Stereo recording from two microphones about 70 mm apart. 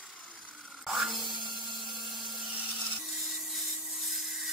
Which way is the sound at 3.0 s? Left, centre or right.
Centre.